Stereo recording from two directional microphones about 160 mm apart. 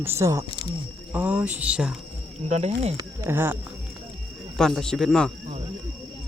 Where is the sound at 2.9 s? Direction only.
15° right (ahead or behind).